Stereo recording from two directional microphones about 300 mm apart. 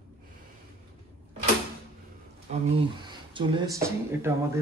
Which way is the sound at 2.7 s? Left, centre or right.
Centre.